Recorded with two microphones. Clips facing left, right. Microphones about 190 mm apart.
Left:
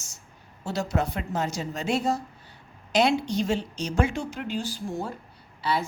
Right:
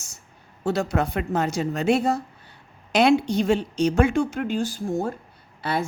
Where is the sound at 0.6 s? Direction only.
60° right (ahead or behind).